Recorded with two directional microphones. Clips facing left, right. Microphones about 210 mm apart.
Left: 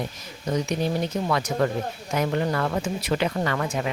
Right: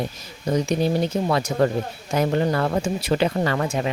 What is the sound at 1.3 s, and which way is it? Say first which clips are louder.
Speech: right 2 dB; 30° right (ahead or behind).